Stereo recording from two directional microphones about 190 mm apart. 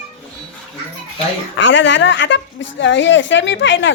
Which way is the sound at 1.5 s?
75° left (ahead or behind).